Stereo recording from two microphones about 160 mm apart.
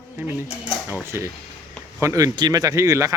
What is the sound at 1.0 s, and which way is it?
Speech, 15° right (ahead or behind).